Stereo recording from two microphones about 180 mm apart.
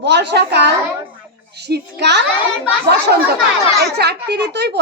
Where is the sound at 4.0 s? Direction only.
70° right (ahead or behind).